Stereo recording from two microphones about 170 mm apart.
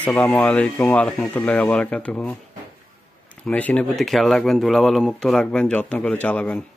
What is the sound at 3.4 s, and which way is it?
Speech, 5° left (ahead or behind).